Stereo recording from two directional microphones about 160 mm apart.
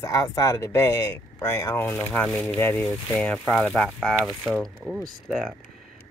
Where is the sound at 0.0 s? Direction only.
20° left (ahead or behind).